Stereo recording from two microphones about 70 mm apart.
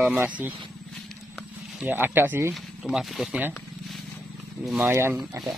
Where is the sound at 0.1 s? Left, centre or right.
Right.